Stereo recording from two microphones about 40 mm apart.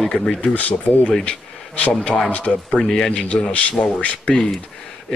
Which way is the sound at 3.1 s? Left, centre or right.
Left.